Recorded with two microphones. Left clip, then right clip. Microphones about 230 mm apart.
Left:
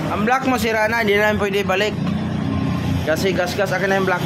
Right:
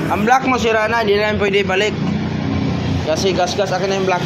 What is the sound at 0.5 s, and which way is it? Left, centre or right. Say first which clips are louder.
Speech: right 3 dB; centre.